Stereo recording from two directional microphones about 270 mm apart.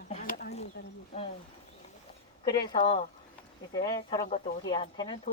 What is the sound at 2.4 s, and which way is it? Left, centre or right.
Speech, centre.